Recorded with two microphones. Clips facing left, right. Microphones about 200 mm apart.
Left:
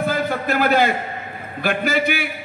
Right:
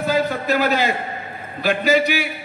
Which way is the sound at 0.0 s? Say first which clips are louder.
Right 1 dB; 55° left (ahead or behind).